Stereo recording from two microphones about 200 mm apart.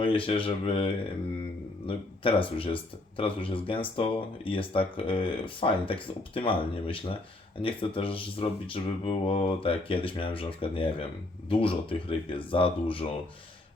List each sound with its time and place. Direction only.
0.0 s speech: 25° left (ahead or behind)